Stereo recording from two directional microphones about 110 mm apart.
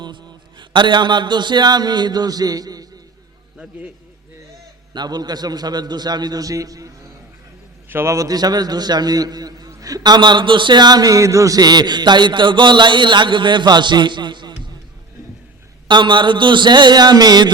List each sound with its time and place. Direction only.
0.0 s a man's voice: 45° right (ahead or behind)
3.6 s a man's voice: 15° right (ahead or behind)
4.9 s a man's voice: 40° right (ahead or behind)
15.9 s a sound: 45° right (ahead or behind)